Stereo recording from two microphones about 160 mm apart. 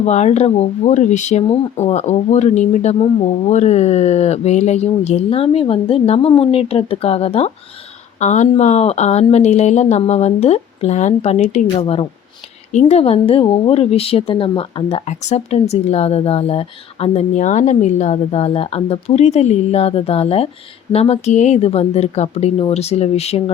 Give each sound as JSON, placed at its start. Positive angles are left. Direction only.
{"t": 0.0, "sound": "speech", "side_deg": 45}